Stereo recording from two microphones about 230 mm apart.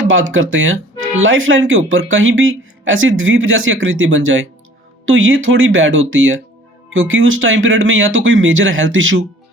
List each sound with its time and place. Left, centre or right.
0.1 s speech: right